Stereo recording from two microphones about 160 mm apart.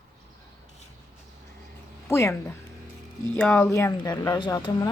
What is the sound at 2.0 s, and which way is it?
Speech, 15° left (ahead or behind).